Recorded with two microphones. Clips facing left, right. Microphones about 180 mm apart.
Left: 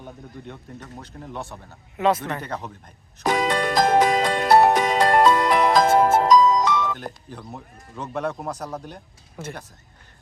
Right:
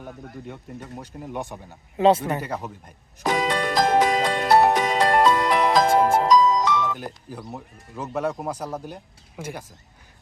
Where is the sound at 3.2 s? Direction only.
50° left (ahead or behind).